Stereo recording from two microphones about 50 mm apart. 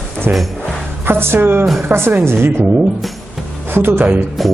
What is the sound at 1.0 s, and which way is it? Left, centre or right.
Speech, right.